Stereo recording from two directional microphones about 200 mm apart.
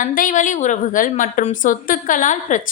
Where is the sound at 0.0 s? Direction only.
40° left (ahead or behind).